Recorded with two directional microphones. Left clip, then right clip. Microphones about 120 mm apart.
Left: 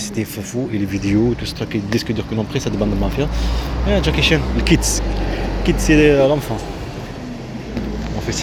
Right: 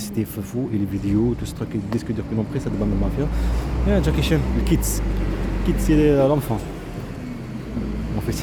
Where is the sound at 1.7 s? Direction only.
5° right (ahead or behind).